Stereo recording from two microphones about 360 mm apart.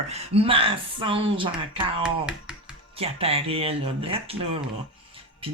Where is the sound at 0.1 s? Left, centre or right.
Centre.